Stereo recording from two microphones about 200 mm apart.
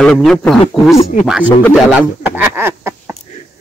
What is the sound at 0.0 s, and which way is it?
Speech, centre (ahead or behind).